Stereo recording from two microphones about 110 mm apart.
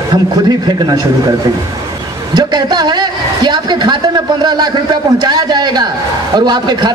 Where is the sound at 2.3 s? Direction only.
35° right (ahead or behind).